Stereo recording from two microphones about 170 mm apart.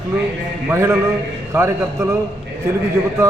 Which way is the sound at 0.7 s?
15° right (ahead or behind).